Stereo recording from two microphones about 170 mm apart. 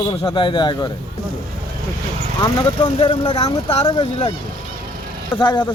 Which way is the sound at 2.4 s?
25° left (ahead or behind).